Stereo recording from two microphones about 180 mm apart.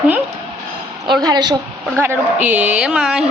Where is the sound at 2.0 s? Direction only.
10° right (ahead or behind).